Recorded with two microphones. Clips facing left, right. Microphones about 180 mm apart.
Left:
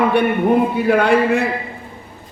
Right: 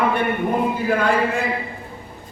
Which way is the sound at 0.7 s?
70° left (ahead or behind).